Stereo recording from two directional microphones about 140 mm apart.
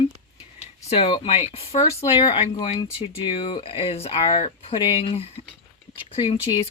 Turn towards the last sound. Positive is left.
turn(degrees=45)  # may be behind; listen again after turning